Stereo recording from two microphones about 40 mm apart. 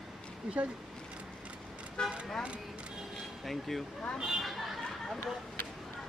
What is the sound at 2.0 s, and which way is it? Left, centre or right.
Speech, centre.